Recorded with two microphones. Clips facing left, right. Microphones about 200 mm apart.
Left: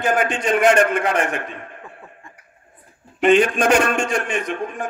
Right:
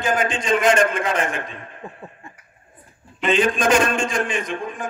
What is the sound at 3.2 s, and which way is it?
Speech, 65° left (ahead or behind).